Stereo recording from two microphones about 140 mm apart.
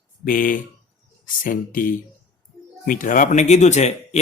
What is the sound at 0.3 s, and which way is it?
Speech, 80° left.